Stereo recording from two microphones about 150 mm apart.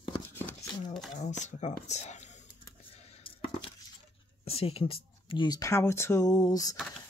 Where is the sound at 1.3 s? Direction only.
50° left (ahead or behind).